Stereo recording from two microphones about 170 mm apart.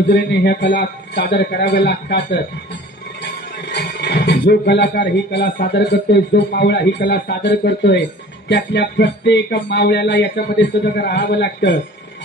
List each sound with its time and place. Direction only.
0.1 s a man's voice: 80° left
3.7 s a man's voice: 80° left